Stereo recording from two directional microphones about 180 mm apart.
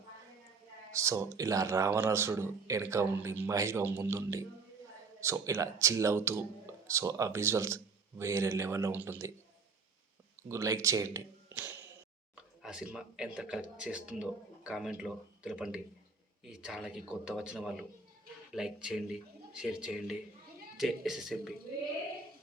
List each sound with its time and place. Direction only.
0.9 s speech: 15° right (ahead or behind)
10.5 s speech: 15° right (ahead or behind); by 21.5 s centre (ahead or behind)